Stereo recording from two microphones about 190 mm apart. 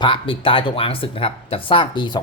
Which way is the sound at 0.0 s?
25° left (ahead or behind).